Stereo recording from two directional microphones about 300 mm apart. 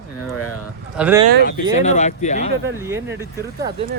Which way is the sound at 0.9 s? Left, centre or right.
Centre.